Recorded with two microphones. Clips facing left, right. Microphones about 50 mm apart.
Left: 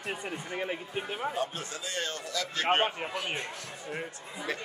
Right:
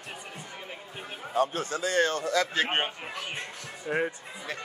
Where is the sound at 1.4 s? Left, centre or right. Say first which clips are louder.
Right 7 dB; right.